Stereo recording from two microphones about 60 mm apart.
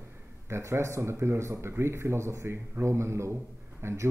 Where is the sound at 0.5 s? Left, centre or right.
Right.